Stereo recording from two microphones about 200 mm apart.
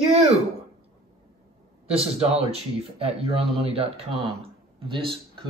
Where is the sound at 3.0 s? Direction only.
30° right (ahead or behind).